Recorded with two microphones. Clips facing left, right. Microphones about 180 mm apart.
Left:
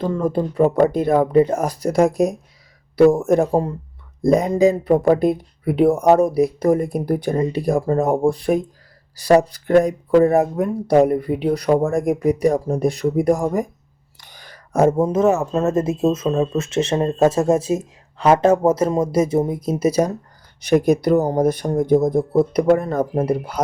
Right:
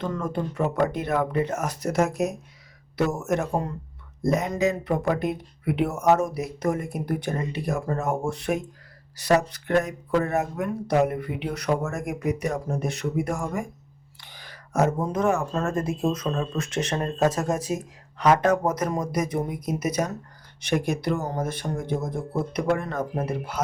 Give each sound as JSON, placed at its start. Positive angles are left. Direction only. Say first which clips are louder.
{"t": 0.0, "sound": "speech", "louder": "left 8 dB", "side_deg": 30}